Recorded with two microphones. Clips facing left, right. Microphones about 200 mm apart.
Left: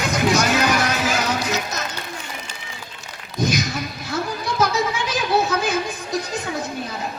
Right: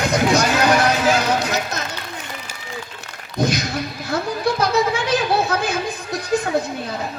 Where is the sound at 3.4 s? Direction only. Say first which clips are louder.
Right 1 dB; 60° right (ahead or behind).